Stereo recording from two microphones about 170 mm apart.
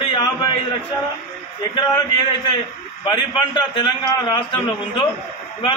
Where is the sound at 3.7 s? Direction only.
25° left (ahead or behind).